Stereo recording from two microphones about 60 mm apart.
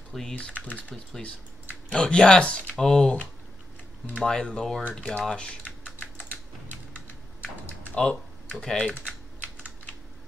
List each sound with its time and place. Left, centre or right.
0.1 s speech: centre
0.7 s speech: left
4.2 s speech: centre
7.9 s speech: centre